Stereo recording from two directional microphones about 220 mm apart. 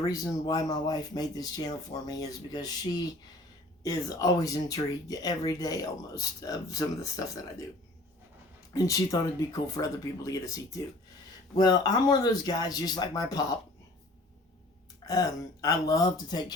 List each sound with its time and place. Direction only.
0.0 s speech: 15° left (ahead or behind)
8.7 s speech: 15° left (ahead or behind)
15.0 s speech: 15° left (ahead or behind)